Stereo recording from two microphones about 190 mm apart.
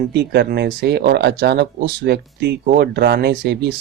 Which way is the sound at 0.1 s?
60° right (ahead or behind).